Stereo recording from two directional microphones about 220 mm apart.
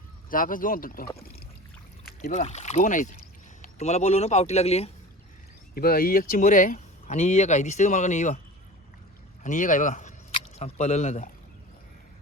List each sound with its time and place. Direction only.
0.3 s speech: 40° left (ahead or behind)
2.0 s speech: 40° left (ahead or behind)
5.7 s speech: 40° left (ahead or behind)
9.4 s speech: 35° left (ahead or behind)